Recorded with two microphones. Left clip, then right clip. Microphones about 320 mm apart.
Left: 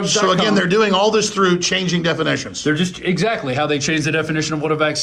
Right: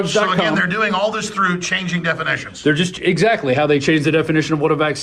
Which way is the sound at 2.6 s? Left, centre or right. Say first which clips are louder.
Right 4 dB; right.